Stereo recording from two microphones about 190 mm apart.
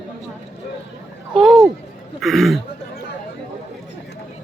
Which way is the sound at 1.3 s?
Centre (ahead or behind).